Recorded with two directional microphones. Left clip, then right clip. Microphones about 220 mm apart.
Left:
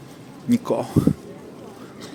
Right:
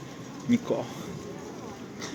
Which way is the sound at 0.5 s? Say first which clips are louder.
Left 6 dB; 35° left (ahead or behind).